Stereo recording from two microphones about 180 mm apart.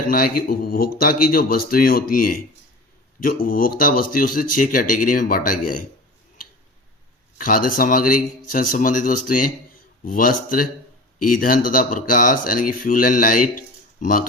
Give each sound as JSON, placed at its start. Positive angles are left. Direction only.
{"t": 0.1, "sound": "speech", "side_deg": 55}
{"t": 3.4, "sound": "speech", "side_deg": 50}
{"t": 7.3, "sound": "speech", "side_deg": 50}